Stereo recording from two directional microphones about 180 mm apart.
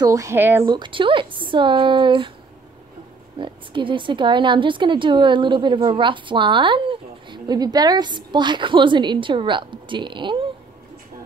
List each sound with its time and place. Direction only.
0.0 s speech: 20° right (ahead or behind)
0.7 s speech: 25° right (ahead or behind)
3.3 s speech: 30° right (ahead or behind)